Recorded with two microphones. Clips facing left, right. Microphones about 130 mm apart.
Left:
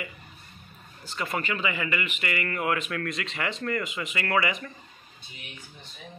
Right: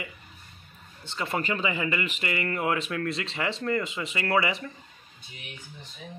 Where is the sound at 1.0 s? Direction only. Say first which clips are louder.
Right 1 dB; 25° right (ahead or behind).